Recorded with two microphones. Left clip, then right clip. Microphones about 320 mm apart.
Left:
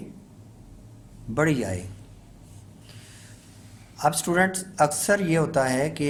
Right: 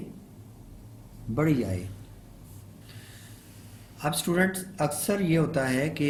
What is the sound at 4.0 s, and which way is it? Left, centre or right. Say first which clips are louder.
Speech: left 5 dB; centre.